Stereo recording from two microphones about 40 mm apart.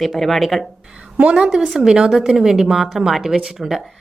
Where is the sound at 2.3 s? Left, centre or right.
Centre.